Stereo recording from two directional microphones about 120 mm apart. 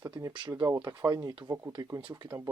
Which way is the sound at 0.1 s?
35° right (ahead or behind).